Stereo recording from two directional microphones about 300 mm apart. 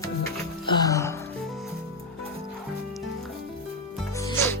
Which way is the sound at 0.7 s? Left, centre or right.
Centre.